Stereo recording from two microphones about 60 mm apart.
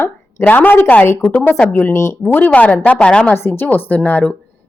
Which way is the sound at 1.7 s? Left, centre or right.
Left.